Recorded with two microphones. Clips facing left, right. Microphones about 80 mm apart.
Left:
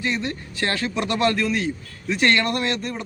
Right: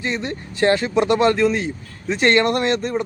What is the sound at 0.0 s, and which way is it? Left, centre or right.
Speech, right.